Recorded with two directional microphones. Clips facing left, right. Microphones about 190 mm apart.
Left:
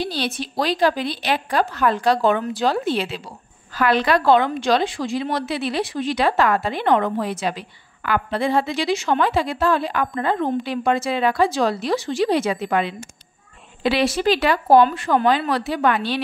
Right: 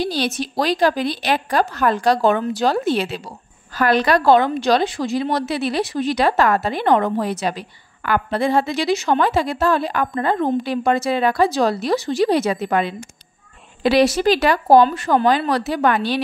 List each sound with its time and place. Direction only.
0.0 s a woman's voice: 45° right (ahead or behind)